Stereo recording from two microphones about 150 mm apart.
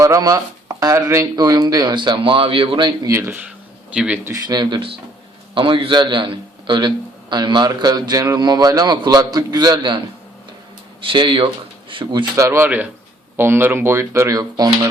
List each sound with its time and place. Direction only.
0.0 s a man's voice: 20° right (ahead or behind)
3.1 s speech: 15° right (ahead or behind)
4.3 s a man's voice: 25° right (ahead or behind)
11.0 s speech: 35° right (ahead or behind)
12.4 s speech: 15° right (ahead or behind)